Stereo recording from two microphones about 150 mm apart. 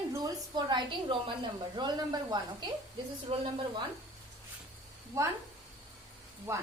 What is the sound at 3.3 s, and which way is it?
Speech, 45° right (ahead or behind).